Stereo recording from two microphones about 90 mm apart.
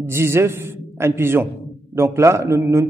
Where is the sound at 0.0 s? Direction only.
30° right (ahead or behind).